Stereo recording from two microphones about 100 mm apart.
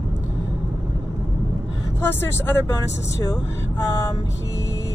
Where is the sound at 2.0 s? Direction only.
25° left (ahead or behind).